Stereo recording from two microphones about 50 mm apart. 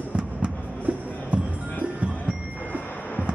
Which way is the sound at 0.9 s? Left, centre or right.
Right.